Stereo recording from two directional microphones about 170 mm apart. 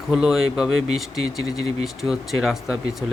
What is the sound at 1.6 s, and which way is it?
Speech, 35° right (ahead or behind).